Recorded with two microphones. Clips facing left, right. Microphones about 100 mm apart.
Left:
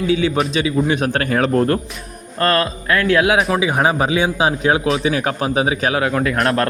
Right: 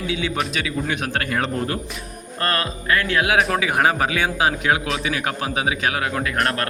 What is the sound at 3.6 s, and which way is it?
A man's voice, 20° left (ahead or behind).